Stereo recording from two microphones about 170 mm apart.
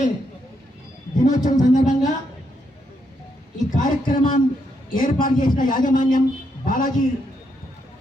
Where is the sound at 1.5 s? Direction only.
45° left (ahead or behind).